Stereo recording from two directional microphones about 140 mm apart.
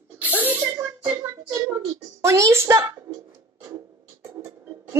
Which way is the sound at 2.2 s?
20° right (ahead or behind).